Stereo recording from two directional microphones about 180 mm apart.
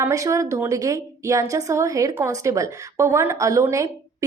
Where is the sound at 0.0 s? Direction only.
15° right (ahead or behind).